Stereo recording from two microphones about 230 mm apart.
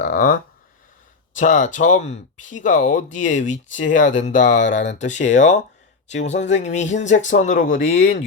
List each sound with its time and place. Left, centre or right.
0.0 s speech: left
1.4 s speech: left